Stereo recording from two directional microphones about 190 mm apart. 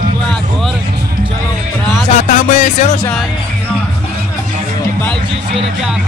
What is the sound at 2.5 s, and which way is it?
Music, 40° left (ahead or behind).